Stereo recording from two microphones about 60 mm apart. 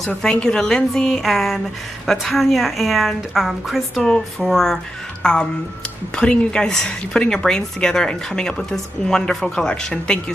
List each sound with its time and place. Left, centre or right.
0.0 s a woman's voice: centre
5.2 s speech: centre